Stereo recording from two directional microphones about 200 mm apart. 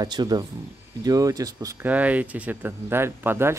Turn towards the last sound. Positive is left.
turn(degrees=-10)  # may be behind; listen again after turning